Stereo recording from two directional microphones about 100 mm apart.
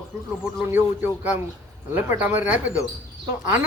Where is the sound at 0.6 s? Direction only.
20° right (ahead or behind).